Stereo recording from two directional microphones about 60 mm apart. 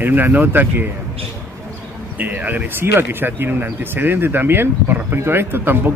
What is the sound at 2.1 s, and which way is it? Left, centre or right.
Speech, right.